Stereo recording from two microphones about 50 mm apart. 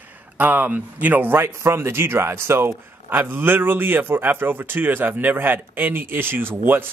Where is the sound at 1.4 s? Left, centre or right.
Right.